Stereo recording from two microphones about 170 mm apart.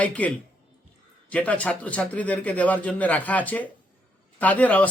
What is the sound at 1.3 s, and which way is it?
Speech, 10° left (ahead or behind).